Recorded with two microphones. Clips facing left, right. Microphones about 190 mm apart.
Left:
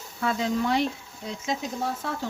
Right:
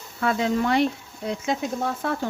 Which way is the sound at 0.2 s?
60° right (ahead or behind).